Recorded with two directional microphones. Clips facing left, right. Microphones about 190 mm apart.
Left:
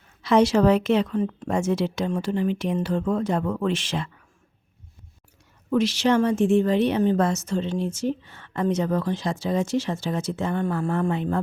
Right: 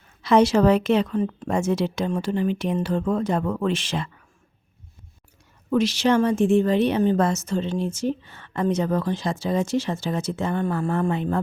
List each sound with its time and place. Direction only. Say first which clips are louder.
0.2 s speech: right 1 dB; 45° right (ahead or behind)
5.7 s speech: right 1 dB; 45° right (ahead or behind)